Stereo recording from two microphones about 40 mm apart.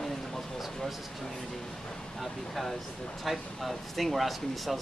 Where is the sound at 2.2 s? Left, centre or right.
Centre.